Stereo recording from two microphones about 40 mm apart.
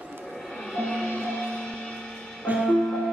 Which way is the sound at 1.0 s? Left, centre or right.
Left.